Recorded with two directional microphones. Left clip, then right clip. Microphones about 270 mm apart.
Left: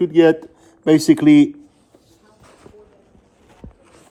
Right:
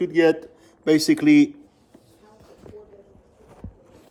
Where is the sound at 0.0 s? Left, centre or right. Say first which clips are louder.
Left 5 dB; centre.